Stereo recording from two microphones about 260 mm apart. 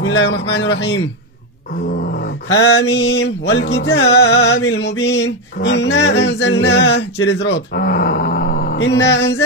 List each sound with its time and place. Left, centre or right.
0.0 s male singing: left